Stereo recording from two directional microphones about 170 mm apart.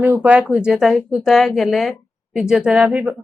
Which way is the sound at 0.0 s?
10° right (ahead or behind).